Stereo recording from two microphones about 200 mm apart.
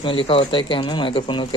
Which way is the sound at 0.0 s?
25° left (ahead or behind).